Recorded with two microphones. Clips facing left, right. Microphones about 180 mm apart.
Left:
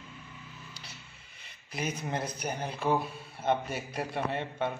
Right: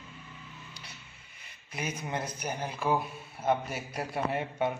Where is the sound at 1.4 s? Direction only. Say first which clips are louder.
Left 2 dB; 30° left (ahead or behind).